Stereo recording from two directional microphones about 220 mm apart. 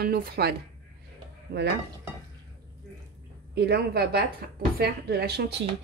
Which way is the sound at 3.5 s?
45° right (ahead or behind).